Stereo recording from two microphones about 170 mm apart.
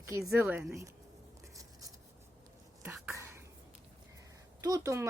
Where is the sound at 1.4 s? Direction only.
20° right (ahead or behind).